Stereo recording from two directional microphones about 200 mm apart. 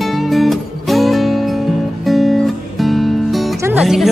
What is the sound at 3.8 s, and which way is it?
Music, centre (ahead or behind).